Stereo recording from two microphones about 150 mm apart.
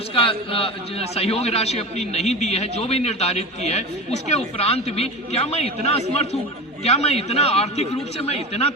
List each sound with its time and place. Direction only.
0.1 s a man's voice: 35° left (ahead or behind)